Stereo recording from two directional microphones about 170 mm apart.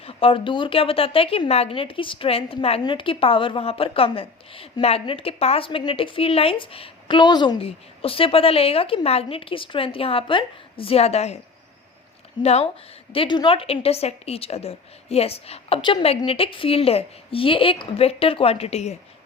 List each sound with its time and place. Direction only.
0.0 s a woman's voice: 35° left (ahead or behind)
12.4 s a woman's voice: 40° left (ahead or behind)